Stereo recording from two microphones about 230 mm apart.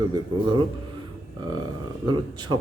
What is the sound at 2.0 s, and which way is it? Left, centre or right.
Speech, centre.